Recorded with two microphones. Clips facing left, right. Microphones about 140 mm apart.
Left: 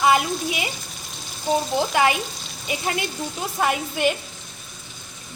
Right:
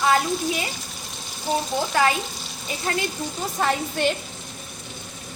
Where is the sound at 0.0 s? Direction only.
15° left (ahead or behind).